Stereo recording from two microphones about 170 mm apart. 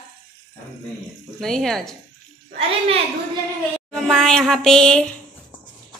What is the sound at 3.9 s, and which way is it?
Speech, 5° left (ahead or behind).